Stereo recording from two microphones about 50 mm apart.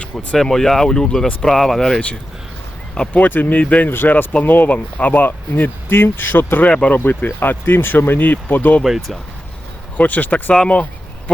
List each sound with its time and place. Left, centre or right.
0.0 s speech: left
0.3 s speech: centre
3.1 s speech: left
3.8 s speech: left
6.7 s speech: left
6.9 s speech: left
8.8 s speech: centre
10.0 s speech: left
10.5 s speech: left